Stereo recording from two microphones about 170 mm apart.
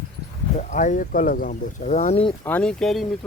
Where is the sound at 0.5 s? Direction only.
45° left (ahead or behind).